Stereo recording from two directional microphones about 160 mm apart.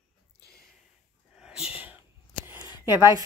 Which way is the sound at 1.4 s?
5° right (ahead or behind).